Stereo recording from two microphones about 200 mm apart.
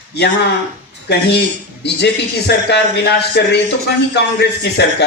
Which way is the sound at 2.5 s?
60° left (ahead or behind).